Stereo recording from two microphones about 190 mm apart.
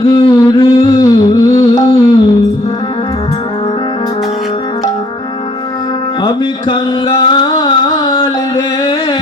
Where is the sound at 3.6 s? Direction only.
30° left (ahead or behind).